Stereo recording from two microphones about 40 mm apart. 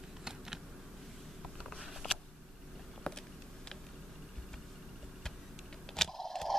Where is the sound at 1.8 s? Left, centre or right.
Centre.